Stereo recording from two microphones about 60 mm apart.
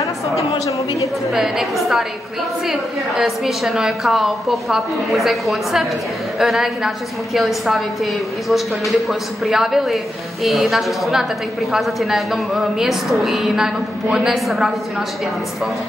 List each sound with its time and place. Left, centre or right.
0.7 s speech: left
1.3 s a woman's voice: centre